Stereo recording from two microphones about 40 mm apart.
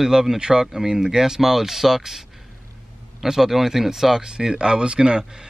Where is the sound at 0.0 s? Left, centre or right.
Centre.